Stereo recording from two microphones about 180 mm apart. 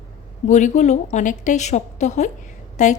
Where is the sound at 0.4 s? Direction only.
40° left (ahead or behind).